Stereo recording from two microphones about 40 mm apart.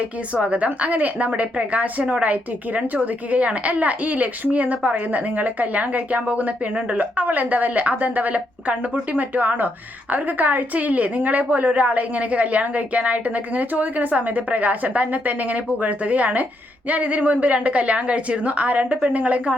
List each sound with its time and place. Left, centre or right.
0.3 s a woman's voice: right